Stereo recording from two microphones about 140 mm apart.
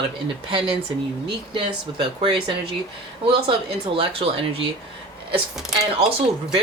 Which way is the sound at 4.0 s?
40° right (ahead or behind).